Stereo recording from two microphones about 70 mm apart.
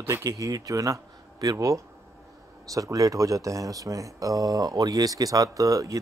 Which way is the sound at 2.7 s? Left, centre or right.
Right.